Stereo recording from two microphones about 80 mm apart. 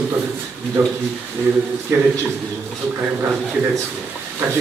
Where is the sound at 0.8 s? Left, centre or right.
Right.